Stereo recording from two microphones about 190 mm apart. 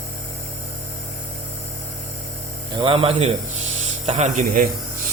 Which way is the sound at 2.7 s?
25° right (ahead or behind).